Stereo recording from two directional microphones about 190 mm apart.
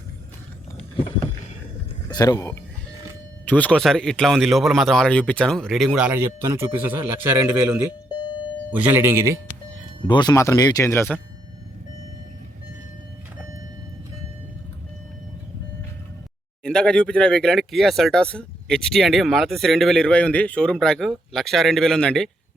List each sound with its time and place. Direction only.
2.0 s speech: 20° left (ahead or behind)
3.4 s speech: 10° left (ahead or behind); by 7.4 s 10° right (ahead or behind)
8.7 s speech: 10° right (ahead or behind)
10.1 s speech: 20° left (ahead or behind)
16.6 s speech: 5° left (ahead or behind)